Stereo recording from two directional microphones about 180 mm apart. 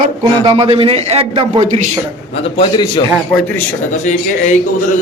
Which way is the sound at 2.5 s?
25° left (ahead or behind).